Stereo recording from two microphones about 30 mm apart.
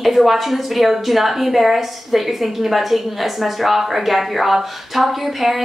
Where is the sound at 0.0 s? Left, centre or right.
Centre.